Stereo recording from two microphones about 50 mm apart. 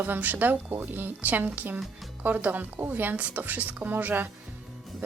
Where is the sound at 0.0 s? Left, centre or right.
Right.